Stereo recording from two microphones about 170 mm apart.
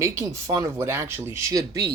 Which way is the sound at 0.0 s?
15° right (ahead or behind).